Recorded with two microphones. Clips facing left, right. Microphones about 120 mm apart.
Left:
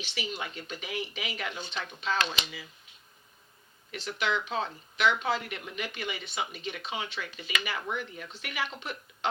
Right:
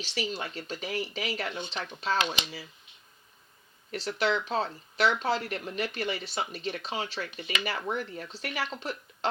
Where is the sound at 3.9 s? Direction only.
40° right (ahead or behind).